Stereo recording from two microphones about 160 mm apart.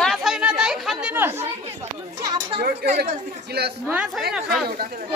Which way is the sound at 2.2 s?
25° right (ahead or behind).